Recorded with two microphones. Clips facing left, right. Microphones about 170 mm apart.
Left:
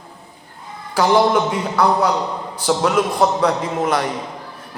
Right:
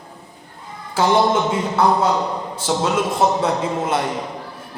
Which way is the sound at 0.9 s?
25° right (ahead or behind).